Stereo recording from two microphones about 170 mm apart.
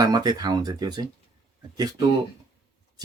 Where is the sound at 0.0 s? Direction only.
25° right (ahead or behind).